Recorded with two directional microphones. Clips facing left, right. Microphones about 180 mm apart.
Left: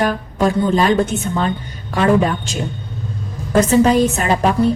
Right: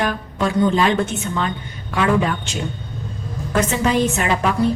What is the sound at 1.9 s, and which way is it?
Speech, 40° left (ahead or behind).